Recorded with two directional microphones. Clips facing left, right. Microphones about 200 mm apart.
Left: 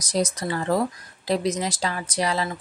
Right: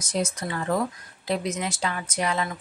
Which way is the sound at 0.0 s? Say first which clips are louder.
Left 3 dB; 35° left (ahead or behind).